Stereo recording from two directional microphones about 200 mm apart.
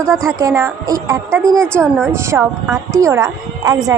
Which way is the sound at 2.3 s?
10° right (ahead or behind).